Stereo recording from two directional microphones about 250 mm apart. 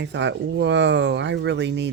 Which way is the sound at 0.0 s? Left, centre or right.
Right.